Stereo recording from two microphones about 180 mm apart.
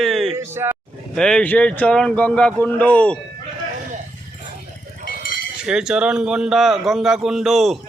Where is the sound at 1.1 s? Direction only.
5° left (ahead or behind).